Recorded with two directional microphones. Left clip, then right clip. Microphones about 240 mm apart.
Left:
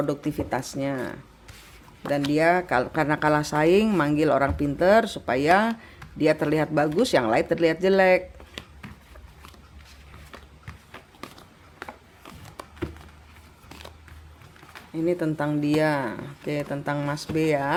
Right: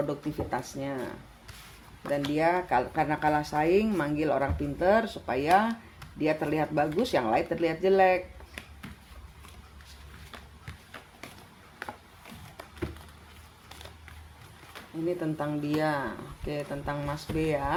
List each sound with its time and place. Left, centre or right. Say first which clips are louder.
0.1 s speech: left 5 dB; left
11.8 s a sound: left 1 dB; centre
15.0 s speech: left 6 dB; left